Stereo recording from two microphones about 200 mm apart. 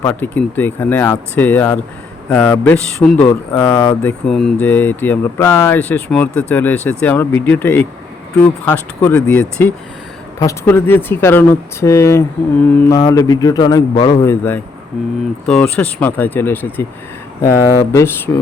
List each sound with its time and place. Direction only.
0.0 s a man's voice: 10° left (ahead or behind)
14.3 s speech: 10° left (ahead or behind)